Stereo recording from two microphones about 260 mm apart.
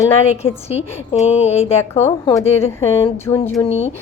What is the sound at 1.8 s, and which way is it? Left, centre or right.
A woman's voice, centre.